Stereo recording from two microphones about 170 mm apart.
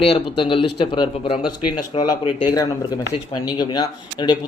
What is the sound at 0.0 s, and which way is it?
Speech, 30° left (ahead or behind).